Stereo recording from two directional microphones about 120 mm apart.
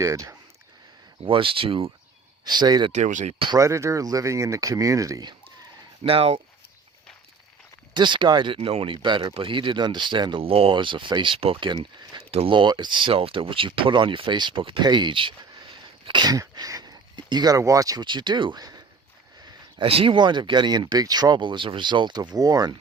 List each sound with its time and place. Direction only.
0.0 s speech: 25° right (ahead or behind)
1.2 s speech: 45° right (ahead or behind)
2.4 s speech: 35° right (ahead or behind)
2.9 s speech: 85° right
3.3 s speech: 45° right (ahead or behind)
3.6 s speech: 25° right (ahead or behind)
6.0 s speech: 55° right (ahead or behind)
7.9 s speech: 40° right (ahead or behind)
19.8 s speech: 50° right (ahead or behind); by 22.7 s 30° right (ahead or behind)